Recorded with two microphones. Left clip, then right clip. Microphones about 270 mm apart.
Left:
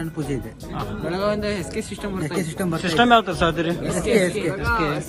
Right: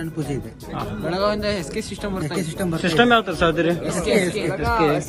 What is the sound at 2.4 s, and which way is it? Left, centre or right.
Speech, centre.